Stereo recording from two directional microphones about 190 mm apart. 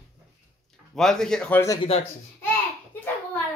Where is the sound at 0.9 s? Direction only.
Centre (ahead or behind).